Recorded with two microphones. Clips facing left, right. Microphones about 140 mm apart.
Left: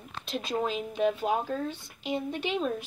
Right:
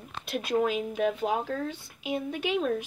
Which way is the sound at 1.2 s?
15° left (ahead or behind).